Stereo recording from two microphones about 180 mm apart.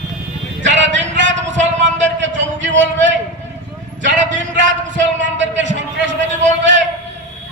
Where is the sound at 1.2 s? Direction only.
40° right (ahead or behind).